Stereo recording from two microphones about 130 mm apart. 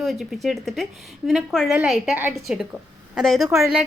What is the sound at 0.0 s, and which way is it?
Speech, centre (ahead or behind).